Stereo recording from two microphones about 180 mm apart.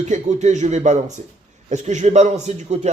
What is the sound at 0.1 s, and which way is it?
A man's voice, 40° right (ahead or behind).